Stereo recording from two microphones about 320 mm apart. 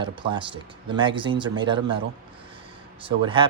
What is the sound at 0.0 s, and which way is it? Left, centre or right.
Speech, centre.